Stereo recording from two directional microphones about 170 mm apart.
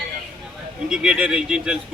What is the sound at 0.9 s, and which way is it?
Speech, 5° right (ahead or behind).